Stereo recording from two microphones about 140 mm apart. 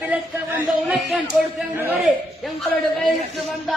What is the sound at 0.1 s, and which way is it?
Speech, 10° right (ahead or behind).